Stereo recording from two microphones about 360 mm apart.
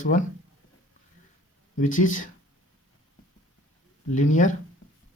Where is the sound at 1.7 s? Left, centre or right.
Left.